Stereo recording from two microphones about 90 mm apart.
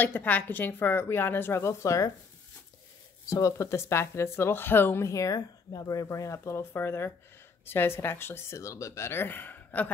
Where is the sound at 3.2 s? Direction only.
40° left (ahead or behind).